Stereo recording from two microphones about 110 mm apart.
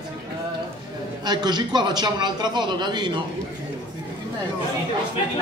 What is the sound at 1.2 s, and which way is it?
A man's voice, 40° right (ahead or behind).